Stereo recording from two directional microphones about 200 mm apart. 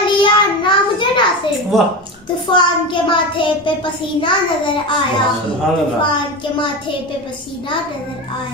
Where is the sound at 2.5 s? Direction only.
25° left (ahead or behind).